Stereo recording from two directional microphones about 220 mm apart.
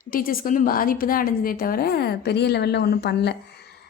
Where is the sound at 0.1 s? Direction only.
40° left (ahead or behind).